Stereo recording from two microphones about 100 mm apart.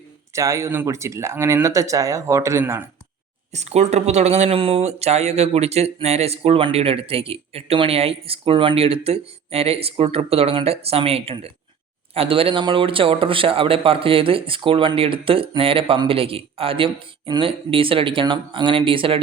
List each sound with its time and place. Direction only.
0.3 s speech: 30° right (ahead or behind)
3.6 s speech: 90° right; by 19.2 s 60° right (ahead or behind)